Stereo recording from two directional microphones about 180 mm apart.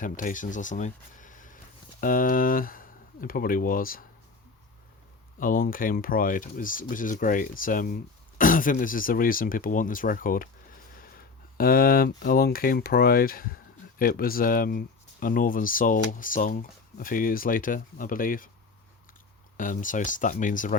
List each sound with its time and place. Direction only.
0.0 s speech: 45° left (ahead or behind)
5.4 s speech: 50° left (ahead or behind)
11.5 s speech: 55° left (ahead or behind)
19.5 s speech: 45° left (ahead or behind)